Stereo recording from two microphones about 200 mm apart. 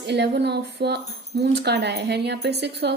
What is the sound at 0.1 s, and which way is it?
A woman's voice, 60° right (ahead or behind).